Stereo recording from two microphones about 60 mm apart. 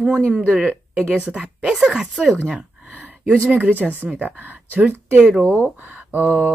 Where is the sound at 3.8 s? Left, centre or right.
Right.